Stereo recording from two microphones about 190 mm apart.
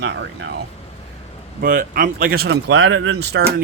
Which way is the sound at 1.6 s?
45° right (ahead or behind).